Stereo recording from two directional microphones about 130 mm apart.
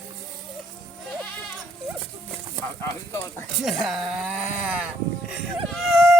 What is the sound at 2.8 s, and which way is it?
Speech, 25° left (ahead or behind).